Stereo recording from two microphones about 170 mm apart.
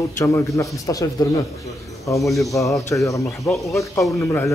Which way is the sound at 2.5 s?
10° left (ahead or behind).